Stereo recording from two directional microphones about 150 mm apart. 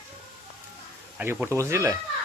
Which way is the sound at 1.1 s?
10° right (ahead or behind).